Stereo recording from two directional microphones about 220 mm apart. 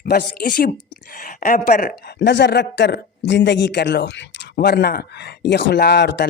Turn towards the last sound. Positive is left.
turn(degrees=50)  # may be behind; listen again after turning